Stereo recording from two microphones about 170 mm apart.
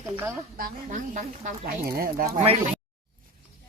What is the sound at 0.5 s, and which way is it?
Speech, 55° right (ahead or behind).